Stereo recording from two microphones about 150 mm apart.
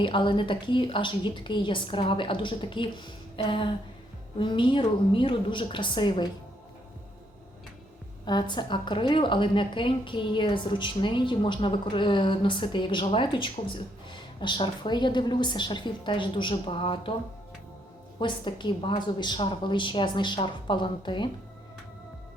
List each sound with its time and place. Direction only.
0.0 s a woman's voice: 35° left (ahead or behind)
8.2 s a woman's voice: 30° left (ahead or behind)
18.2 s a woman's voice: 30° left (ahead or behind)